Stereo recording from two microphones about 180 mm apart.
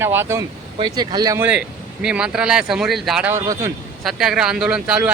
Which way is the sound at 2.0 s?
5° right (ahead or behind).